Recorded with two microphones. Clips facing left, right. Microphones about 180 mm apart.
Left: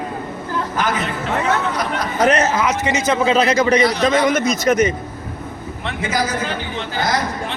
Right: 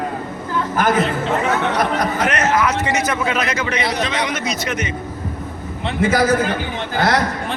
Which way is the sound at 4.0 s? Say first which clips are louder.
Left 6 dB; 45° left (ahead or behind).